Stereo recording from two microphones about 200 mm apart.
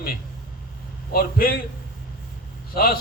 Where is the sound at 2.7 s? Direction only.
50° left (ahead or behind).